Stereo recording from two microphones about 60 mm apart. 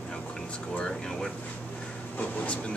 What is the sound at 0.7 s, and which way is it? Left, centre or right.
Speech, centre.